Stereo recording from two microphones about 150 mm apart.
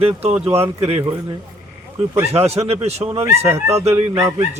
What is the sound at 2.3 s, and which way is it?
Speech, 45° right (ahead or behind).